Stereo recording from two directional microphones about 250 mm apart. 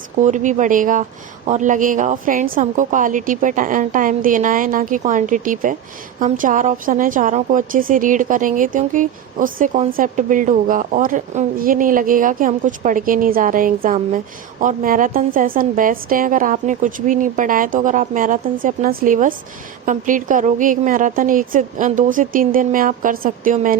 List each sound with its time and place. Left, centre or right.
0.2 s a woman's voice: right